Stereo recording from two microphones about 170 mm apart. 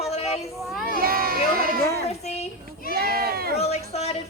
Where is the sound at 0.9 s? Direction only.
60° right (ahead or behind).